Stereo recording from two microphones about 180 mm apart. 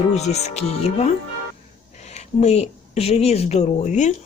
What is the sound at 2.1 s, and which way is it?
A woman's voice, 35° left (ahead or behind).